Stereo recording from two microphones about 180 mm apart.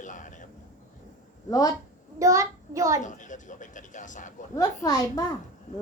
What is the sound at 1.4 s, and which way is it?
Speech, 20° left (ahead or behind).